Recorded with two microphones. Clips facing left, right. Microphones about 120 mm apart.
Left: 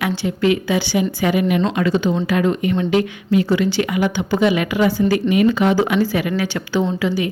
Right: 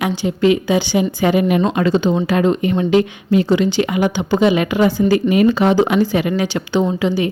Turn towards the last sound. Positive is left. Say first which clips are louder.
# right 3 dB
turn(degrees=-25)  # may be behind; listen again after turning